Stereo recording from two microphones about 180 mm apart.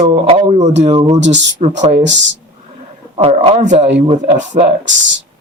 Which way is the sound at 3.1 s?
35° right (ahead or behind).